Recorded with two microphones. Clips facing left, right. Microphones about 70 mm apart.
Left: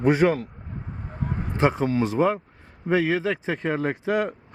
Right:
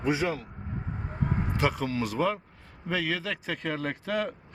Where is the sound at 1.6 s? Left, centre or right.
Left.